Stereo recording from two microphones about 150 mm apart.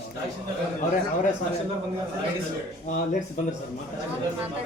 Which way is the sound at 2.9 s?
50° left (ahead or behind).